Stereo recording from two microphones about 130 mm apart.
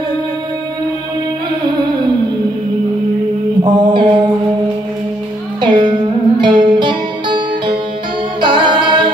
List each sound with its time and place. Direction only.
3.6 s mantra: 35° right (ahead or behind)
5.6 s music: 35° right (ahead or behind)
8.4 s singing: 35° right (ahead or behind)